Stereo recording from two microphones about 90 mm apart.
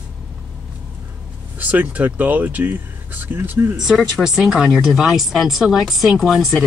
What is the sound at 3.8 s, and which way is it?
Speech, 5° right (ahead or behind).